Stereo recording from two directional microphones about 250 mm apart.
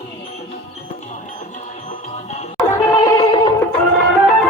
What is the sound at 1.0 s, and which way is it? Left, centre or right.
Music, left.